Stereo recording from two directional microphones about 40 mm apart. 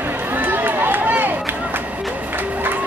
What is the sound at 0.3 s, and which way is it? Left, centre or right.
Run, right.